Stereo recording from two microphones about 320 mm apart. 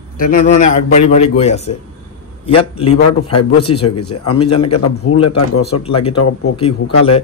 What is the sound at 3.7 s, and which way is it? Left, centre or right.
Speech, left.